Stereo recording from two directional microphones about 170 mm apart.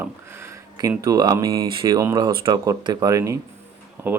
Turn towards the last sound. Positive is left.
turn(degrees=-10)  # may be behind; listen again after turning